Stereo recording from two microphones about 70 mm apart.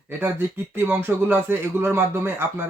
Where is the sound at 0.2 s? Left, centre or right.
Right.